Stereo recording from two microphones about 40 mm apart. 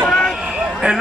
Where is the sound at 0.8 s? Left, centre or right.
Right.